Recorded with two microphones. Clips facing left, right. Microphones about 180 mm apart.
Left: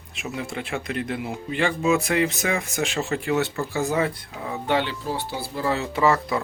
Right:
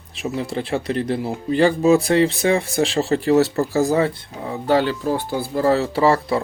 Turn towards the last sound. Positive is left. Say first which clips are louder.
# right 4 dB
turn(degrees=-30)  # may be behind; listen again after turning